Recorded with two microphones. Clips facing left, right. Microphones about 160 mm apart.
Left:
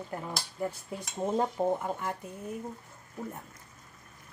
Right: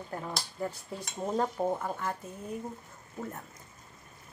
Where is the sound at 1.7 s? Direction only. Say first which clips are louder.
Left 1 dB; 20° left (ahead or behind).